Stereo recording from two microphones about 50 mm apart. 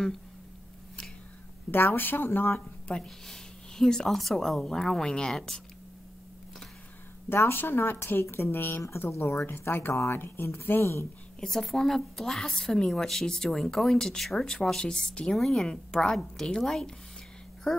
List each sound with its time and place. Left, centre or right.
1.7 s speech: left
2.9 s speech: centre
7.2 s speech: left
11.3 s speech: centre
15.3 s speech: centre